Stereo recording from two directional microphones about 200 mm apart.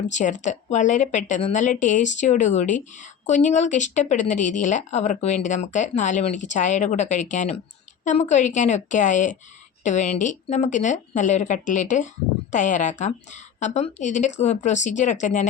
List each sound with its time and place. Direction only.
0.1 s speech: 40° left (ahead or behind)